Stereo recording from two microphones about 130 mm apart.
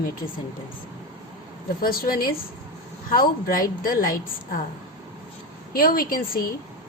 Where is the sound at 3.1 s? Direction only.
90° left.